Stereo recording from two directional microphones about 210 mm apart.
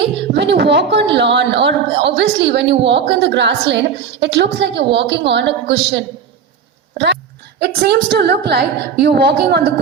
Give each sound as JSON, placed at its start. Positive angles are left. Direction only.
{"t": 0.2, "sound": "a woman's voice", "side_deg": -55}
{"t": 7.6, "sound": "a woman's voice", "side_deg": -50}